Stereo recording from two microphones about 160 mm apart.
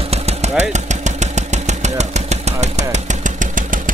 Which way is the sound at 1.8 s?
45° right (ahead or behind).